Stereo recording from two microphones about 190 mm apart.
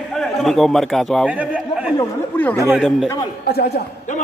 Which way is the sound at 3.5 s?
55° left (ahead or behind).